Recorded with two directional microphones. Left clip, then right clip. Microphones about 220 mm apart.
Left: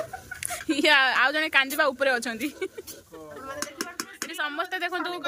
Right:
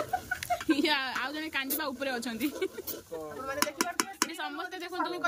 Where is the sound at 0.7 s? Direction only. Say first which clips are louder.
Left 10 dB; centre (ahead or behind).